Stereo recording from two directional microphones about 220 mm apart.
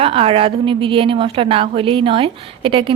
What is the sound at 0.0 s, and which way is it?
A woman's voice, 25° right (ahead or behind).